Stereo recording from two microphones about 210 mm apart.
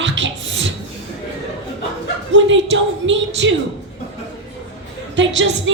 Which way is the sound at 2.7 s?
60° right (ahead or behind).